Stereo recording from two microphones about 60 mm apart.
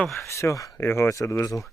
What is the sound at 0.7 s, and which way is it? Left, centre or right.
Speech, left.